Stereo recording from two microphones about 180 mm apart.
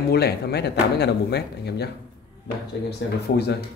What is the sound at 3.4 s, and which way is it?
Speech, 65° left (ahead or behind).